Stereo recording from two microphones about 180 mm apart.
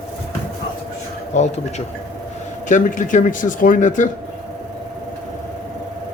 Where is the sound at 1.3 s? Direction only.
40° left (ahead or behind).